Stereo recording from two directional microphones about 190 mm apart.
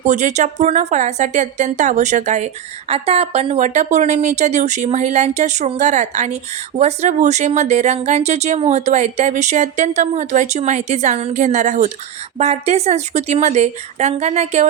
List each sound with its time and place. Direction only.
0.0 s speech: 40° right (ahead or behind)